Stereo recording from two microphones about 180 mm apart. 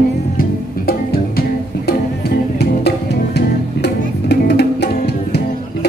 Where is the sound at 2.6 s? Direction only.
65° left (ahead or behind).